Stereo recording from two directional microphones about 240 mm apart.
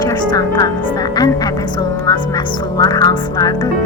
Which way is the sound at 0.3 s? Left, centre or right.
Centre.